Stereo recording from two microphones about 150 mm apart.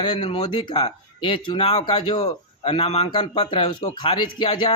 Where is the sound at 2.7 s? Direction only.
40° left (ahead or behind).